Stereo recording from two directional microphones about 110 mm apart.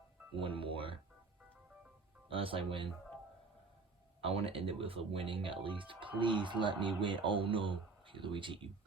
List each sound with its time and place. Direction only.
0.3 s speech: 50° right (ahead or behind)
2.3 s speech: 55° right (ahead or behind)
4.2 s speech: 60° right (ahead or behind)